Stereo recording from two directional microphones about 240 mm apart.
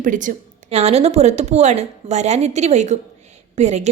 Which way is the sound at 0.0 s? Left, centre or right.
Right.